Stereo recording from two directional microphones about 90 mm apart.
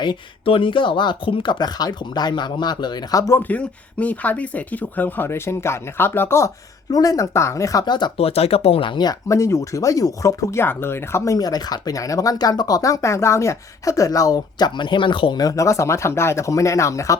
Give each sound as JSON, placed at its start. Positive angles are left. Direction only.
{"t": 0.0, "sound": "speech", "side_deg": 70}
{"t": 3.3, "sound": "speech", "side_deg": 20}
{"t": 6.9, "sound": "speech", "side_deg": 40}
{"t": 8.1, "sound": "speech", "side_deg": 90}
{"t": 9.3, "sound": "speech", "side_deg": 35}
{"t": 11.3, "sound": "speech", "side_deg": 45}
{"t": 15.4, "sound": "speech", "side_deg": 40}